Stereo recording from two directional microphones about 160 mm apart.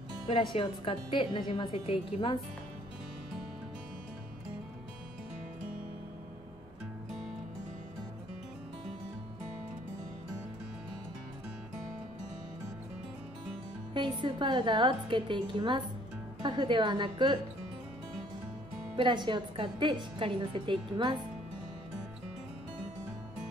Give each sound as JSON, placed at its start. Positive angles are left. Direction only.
{"t": 0.6, "sound": "a woman's voice", "side_deg": 35}
{"t": 13.9, "sound": "a woman's voice", "side_deg": -30}
{"t": 18.9, "sound": "a woman's voice", "side_deg": -30}